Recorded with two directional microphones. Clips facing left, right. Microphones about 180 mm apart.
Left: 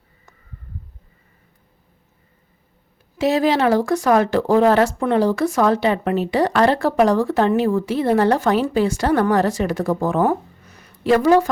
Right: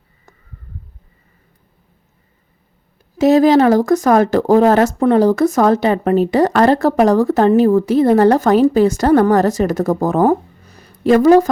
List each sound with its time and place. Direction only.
3.2 s speech: 40° right (ahead or behind)